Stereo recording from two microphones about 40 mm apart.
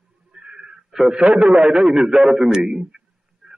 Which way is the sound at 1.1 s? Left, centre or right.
Right.